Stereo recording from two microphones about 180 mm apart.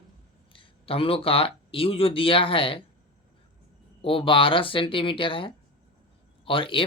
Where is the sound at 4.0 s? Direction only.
30° left (ahead or behind).